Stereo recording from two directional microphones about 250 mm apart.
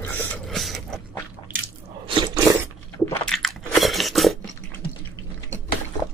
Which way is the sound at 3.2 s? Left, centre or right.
Centre.